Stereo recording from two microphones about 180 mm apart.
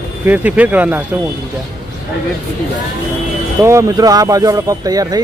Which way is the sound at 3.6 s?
15° right (ahead or behind).